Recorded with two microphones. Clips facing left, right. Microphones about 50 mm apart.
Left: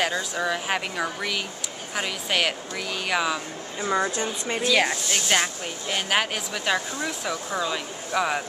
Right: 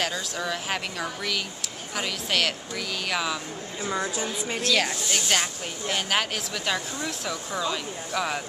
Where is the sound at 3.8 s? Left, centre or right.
Left.